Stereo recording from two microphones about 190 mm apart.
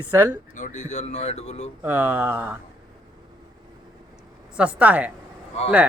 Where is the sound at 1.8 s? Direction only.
10° right (ahead or behind).